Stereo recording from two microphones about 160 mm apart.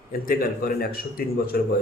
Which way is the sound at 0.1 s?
65° left (ahead or behind).